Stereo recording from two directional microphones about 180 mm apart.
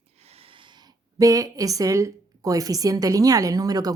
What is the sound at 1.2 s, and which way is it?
A woman's voice, 20° right (ahead or behind).